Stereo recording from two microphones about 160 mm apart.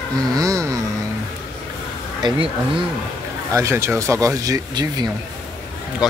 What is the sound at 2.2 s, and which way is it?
Speech, 30° right (ahead or behind).